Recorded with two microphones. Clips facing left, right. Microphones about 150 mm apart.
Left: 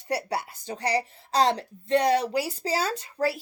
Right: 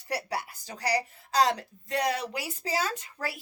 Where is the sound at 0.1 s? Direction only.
25° left (ahead or behind).